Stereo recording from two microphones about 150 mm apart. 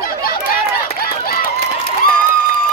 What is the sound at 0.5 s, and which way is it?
Run, 90° left.